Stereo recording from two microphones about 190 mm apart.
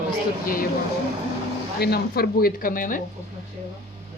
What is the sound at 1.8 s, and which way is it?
Speech, 55° left (ahead or behind).